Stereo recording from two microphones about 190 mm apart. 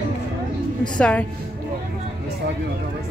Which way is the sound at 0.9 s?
5° left (ahead or behind).